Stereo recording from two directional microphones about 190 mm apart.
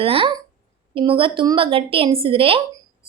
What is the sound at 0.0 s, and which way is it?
A woman's voice, 30° right (ahead or behind).